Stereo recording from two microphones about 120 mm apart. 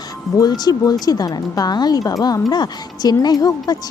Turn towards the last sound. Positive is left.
turn(degrees=35)  # may be behind; listen again after turning